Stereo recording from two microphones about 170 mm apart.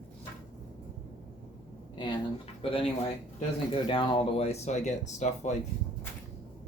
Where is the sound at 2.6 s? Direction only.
35° left (ahead or behind).